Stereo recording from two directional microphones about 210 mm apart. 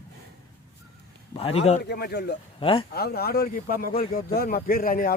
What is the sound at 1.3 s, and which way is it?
Speech, 30° left (ahead or behind).